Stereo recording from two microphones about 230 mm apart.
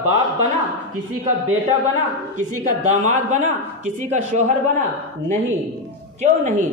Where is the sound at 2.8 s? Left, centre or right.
Right.